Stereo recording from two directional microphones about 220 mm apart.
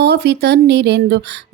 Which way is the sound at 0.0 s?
50° right (ahead or behind).